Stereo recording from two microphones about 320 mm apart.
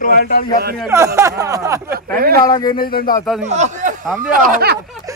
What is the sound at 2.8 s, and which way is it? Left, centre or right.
Speech, left.